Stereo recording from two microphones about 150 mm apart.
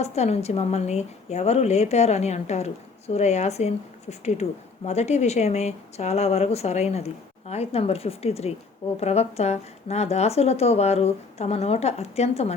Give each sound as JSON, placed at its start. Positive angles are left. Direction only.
{"t": 0.0, "sound": "speech", "side_deg": 45}